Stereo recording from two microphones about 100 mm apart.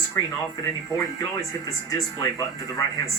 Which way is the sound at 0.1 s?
35° left (ahead or behind).